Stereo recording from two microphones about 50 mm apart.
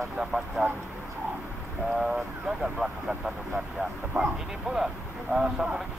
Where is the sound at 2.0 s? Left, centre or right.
Centre.